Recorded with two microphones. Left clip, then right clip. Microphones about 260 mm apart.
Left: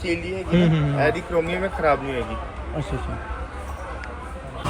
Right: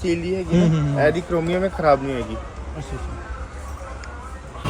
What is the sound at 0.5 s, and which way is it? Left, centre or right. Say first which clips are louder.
Speech: left 1 dB; centre.